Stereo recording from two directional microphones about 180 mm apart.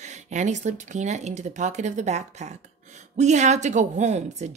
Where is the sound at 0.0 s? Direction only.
40° right (ahead or behind).